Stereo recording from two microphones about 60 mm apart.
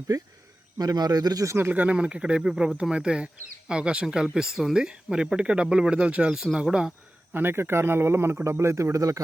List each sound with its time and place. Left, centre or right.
0.8 s speech: right
1.7 s speech: right
6.3 s speech: centre
7.3 s speech: right